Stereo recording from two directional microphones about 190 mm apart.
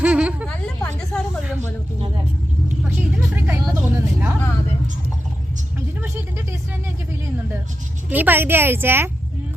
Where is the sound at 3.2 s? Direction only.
10° right (ahead or behind).